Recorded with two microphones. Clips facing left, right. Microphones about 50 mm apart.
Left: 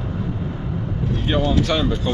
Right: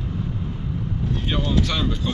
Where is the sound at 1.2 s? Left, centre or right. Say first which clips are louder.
Left 5 dB; centre.